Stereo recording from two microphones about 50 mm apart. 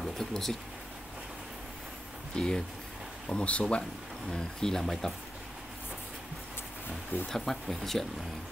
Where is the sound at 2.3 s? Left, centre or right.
Centre.